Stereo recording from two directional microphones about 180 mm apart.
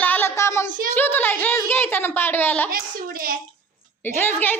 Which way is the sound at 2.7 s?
55° right (ahead or behind).